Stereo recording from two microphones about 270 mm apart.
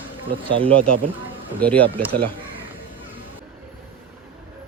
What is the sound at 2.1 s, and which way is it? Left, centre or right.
Speech, right.